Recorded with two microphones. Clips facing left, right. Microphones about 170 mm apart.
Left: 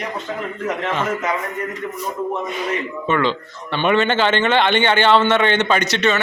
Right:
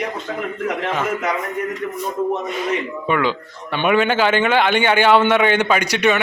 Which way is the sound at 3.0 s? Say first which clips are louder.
Left 2 dB; 10° right (ahead or behind).